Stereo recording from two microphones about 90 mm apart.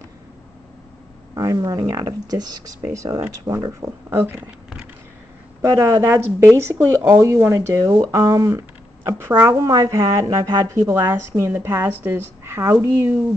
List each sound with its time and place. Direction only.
1.3 s speech: 40° right (ahead or behind)
4.1 s speech: 25° right (ahead or behind)
5.6 s a woman's voice: 30° right (ahead or behind)
8.5 s a sound: 25° right (ahead or behind)
9.4 s a woman's voice: 45° right (ahead or behind); by 13.2 s 25° right (ahead or behind)